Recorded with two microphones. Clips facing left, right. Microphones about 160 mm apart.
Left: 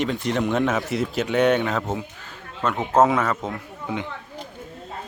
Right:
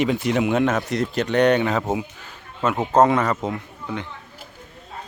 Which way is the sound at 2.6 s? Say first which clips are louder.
Right 2 dB; centre (ahead or behind).